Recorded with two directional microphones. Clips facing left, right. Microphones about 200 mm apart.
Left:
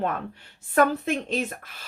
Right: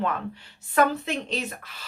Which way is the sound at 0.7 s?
50° left (ahead or behind).